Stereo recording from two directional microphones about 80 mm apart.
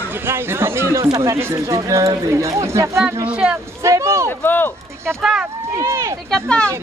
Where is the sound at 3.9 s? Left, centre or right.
Right.